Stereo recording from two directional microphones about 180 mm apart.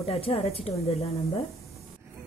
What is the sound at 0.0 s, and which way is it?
A woman's voice, 30° left (ahead or behind).